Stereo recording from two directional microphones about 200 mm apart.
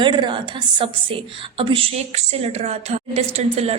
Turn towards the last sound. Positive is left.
turn(degrees=-30)  # may be behind; listen again after turning